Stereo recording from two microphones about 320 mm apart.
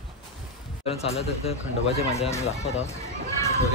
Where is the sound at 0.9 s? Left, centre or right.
Centre.